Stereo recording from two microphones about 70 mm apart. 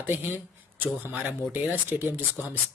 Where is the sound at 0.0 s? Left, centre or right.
Right.